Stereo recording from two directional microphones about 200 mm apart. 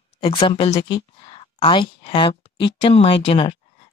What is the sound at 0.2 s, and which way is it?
Speech, 25° left (ahead or behind).